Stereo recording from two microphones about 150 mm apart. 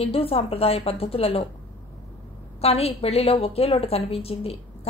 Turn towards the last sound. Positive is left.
turn(degrees=40)  # may be behind; listen again after turning